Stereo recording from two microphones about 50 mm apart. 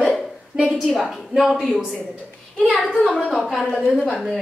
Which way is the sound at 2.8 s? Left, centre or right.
Centre.